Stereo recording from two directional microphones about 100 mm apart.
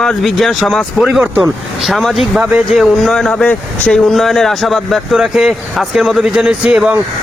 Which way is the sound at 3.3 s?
15° left (ahead or behind).